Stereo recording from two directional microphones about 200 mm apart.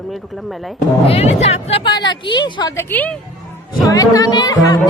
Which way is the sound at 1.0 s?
30° left (ahead or behind).